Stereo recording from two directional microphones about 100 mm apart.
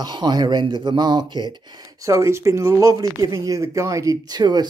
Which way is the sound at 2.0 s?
30° right (ahead or behind).